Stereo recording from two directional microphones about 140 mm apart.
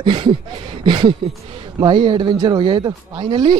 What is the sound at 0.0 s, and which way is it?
Speech, 35° right (ahead or behind).